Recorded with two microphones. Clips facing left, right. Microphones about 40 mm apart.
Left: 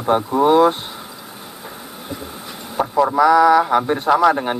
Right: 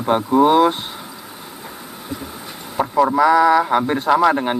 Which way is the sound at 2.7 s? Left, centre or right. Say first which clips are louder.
Even; centre.